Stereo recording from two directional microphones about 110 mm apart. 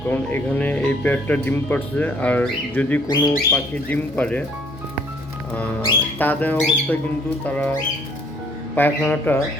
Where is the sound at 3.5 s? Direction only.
15° left (ahead or behind).